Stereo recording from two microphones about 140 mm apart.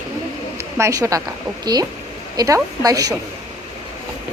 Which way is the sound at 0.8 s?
20° right (ahead or behind).